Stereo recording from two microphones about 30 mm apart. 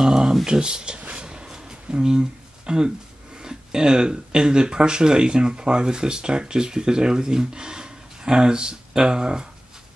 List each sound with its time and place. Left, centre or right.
0.0 s speech: right
1.1 s a sound: right
1.9 s speech: right